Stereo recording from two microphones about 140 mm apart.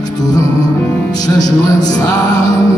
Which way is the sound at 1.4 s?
25° left (ahead or behind).